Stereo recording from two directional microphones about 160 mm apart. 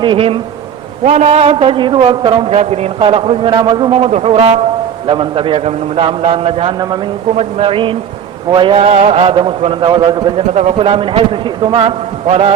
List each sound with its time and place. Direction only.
0.0 s a man's voice: 35° right (ahead or behind)
1.0 s a man's voice: 45° right (ahead or behind); by 10.4 s 30° right (ahead or behind)
10.5 s a man's voice: 45° right (ahead or behind)